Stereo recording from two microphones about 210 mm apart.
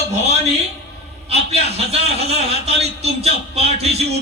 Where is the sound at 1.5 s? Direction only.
30° right (ahead or behind).